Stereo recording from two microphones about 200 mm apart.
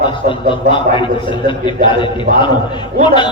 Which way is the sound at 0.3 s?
25° left (ahead or behind).